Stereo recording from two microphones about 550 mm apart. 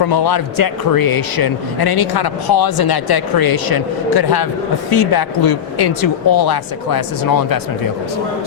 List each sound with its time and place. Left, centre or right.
0.0 s speech: left